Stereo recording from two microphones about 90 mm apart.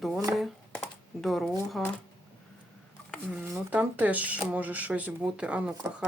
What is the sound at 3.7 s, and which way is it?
Speech, 15° right (ahead or behind).